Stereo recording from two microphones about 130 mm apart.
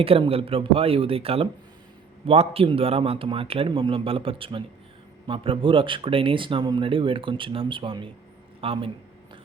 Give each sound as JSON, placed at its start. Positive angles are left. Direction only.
{"t": 0.0, "sound": "a man's voice", "side_deg": -45}